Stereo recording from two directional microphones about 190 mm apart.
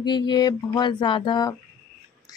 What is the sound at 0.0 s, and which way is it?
Speech, 25° left (ahead or behind).